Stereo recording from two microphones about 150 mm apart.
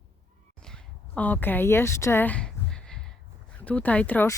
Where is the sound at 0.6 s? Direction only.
5° left (ahead or behind).